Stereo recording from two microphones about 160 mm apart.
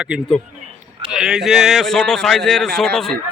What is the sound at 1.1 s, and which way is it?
Speech, 5° right (ahead or behind).